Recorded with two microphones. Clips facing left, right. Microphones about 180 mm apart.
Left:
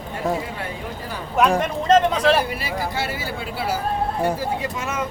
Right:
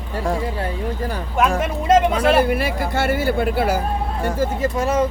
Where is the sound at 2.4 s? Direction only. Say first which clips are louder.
Right 6 dB; 55° right (ahead or behind).